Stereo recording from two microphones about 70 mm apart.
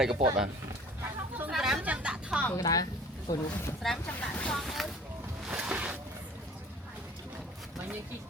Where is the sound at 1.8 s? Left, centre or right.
Centre.